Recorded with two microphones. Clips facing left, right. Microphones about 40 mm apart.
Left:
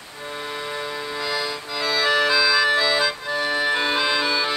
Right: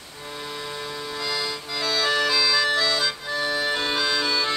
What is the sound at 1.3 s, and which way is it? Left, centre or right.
Music, centre.